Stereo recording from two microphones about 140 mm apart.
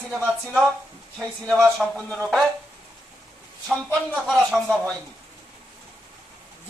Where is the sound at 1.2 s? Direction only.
Centre (ahead or behind).